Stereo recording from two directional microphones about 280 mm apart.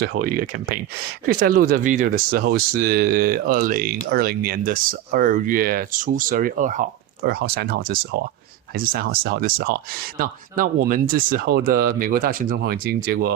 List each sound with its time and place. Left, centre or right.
0.3 s speech: right